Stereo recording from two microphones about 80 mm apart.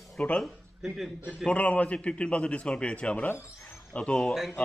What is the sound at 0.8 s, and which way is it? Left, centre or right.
Speech, centre.